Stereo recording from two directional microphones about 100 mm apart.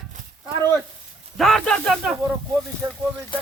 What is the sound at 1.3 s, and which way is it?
Speech, 5° left (ahead or behind).